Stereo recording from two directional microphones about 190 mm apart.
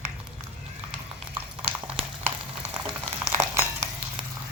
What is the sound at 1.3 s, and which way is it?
Boiling, 10° right (ahead or behind).